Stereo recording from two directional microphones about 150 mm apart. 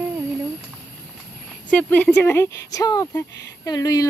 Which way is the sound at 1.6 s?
10° left (ahead or behind).